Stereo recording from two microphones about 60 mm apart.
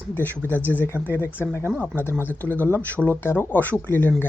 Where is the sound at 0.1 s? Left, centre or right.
Left.